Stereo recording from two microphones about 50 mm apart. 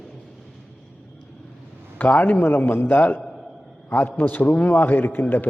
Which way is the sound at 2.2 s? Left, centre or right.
Left.